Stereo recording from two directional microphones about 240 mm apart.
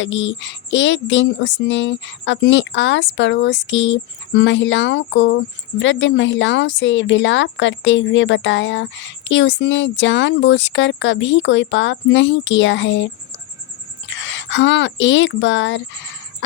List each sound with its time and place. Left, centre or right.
0.0 s speech: left
14.1 s speech: left